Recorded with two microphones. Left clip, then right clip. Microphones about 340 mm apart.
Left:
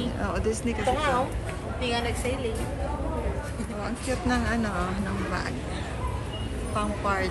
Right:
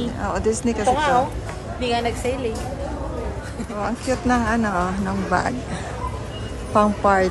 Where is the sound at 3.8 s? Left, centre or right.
Centre.